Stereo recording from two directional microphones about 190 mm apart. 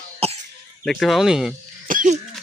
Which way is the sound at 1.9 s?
45° right (ahead or behind).